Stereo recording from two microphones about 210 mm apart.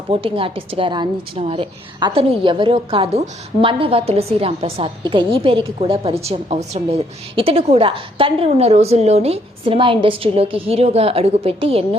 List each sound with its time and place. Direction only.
0.1 s a woman's voice: 25° right (ahead or behind)